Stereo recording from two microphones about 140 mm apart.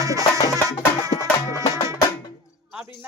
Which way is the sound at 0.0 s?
25° right (ahead or behind).